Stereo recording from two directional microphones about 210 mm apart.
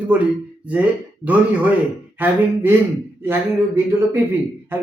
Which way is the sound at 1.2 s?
5° right (ahead or behind).